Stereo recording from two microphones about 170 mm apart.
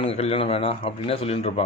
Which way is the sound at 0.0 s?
35° left (ahead or behind).